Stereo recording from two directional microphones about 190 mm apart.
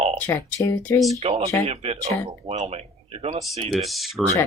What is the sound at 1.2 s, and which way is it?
Speech, 30° right (ahead or behind).